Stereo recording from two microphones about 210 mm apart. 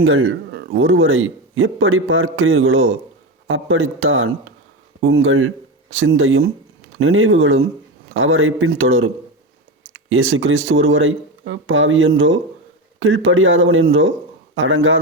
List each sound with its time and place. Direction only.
0.0 s speech: 70° right (ahead or behind)